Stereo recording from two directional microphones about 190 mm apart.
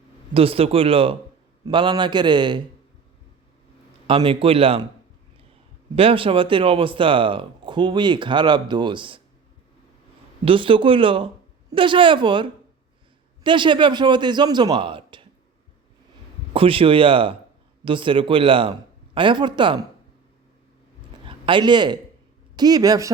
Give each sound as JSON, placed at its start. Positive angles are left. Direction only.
{"t": 0.3, "sound": "speech", "side_deg": -30}
{"t": 4.0, "sound": "speech", "side_deg": -30}
{"t": 6.0, "sound": "speech", "side_deg": -30}
{"t": 10.4, "sound": "speech", "side_deg": -25}
{"t": 16.5, "sound": "speech", "side_deg": -30}
{"t": 21.2, "sound": "a man's voice", "side_deg": -25}